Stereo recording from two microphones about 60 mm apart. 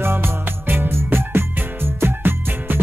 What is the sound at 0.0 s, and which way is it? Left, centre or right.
Music, right.